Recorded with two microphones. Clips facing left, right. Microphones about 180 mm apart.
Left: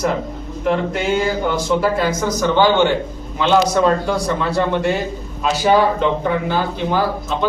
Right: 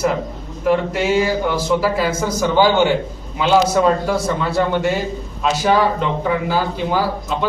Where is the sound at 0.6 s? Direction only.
5° right (ahead or behind).